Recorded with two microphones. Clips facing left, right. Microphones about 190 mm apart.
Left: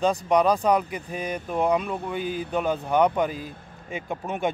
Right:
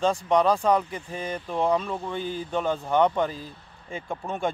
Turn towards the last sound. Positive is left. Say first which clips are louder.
# left 1 dB
turn(degrees=15)  # may be behind; listen again after turning